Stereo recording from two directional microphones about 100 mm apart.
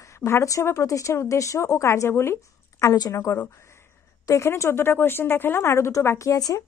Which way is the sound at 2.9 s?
40° left (ahead or behind).